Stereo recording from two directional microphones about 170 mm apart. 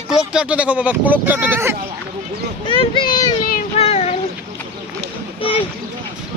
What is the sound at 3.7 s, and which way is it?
Child singing, 35° left (ahead or behind).